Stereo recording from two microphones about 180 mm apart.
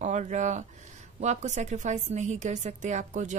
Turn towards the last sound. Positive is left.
turn(degrees=-40)  # may be behind; listen again after turning